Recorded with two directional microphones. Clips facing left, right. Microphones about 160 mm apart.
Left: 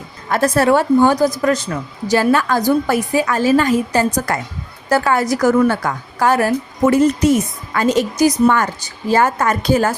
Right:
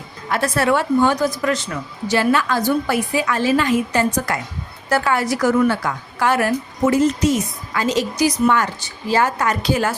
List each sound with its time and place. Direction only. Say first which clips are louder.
0.3 s a woman's voice: left 4 dB; 40° left (ahead or behind)
6.8 s a woman's voice: left 3 dB; 55° left (ahead or behind)